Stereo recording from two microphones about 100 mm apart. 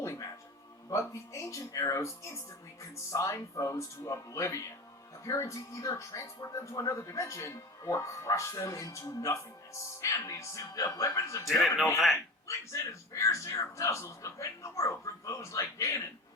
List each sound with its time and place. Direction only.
0.0 s music: 30° left (ahead or behind)
0.9 s speech: 30° left (ahead or behind)
12.5 s speech: 30° left (ahead or behind)